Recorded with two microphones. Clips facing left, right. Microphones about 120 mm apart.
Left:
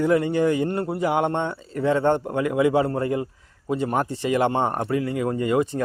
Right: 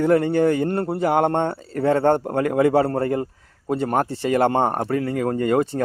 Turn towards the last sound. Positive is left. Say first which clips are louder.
# right 2 dB
turn(degrees=-45)  # may be behind; listen again after turning